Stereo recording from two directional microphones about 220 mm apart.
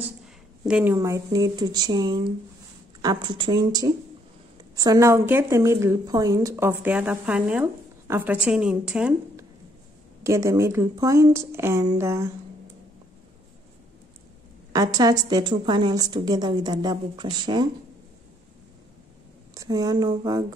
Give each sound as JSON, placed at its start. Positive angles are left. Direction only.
{"t": 0.7, "sound": "a woman's voice", "side_deg": -5}
{"t": 10.2, "sound": "a woman's voice", "side_deg": -15}
{"t": 14.7, "sound": "a woman's voice", "side_deg": -15}
{"t": 19.5, "sound": "speech", "side_deg": -15}